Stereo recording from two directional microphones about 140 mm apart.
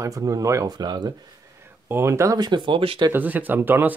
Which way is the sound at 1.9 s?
20° right (ahead or behind).